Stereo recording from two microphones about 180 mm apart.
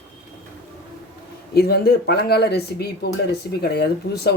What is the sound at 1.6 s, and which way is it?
Speech, 60° left (ahead or behind).